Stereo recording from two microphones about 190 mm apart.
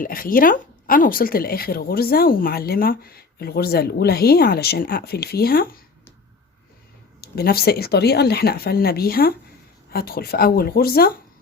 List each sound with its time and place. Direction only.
0.0 s speech: 50° left (ahead or behind)
7.2 s speech: 55° left (ahead or behind)